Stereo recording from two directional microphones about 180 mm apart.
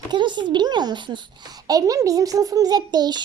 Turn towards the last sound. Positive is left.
turn(degrees=-25)  # may be behind; listen again after turning